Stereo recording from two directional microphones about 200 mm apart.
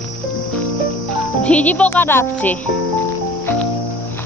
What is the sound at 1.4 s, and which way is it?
Speech, 5° left (ahead or behind).